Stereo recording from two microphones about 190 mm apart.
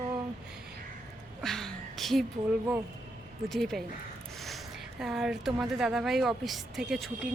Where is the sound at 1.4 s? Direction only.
Centre (ahead or behind).